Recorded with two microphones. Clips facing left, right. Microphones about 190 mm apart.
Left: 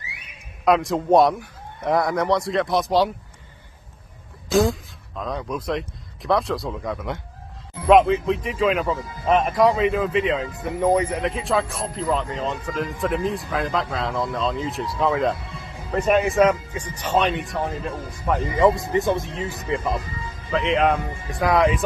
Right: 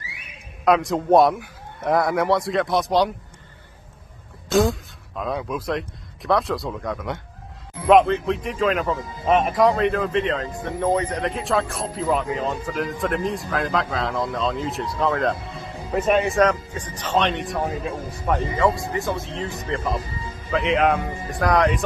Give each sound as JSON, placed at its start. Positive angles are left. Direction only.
{"t": 0.7, "sound": "speech", "side_deg": 0}
{"t": 4.5, "sound": "speech", "side_deg": 0}
{"t": 18.6, "sound": "speech", "side_deg": 20}
{"t": 19.3, "sound": "speech", "side_deg": 5}